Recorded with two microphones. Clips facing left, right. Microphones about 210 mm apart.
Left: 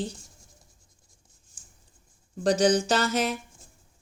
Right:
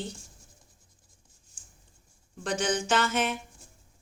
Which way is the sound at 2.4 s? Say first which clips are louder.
Left 7 dB; 35° left (ahead or behind).